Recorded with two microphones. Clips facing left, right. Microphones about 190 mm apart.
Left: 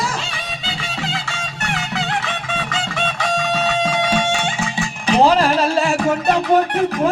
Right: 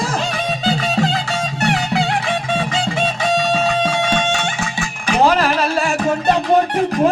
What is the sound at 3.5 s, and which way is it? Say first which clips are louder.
Music: right 2 dB; 5° left (ahead or behind).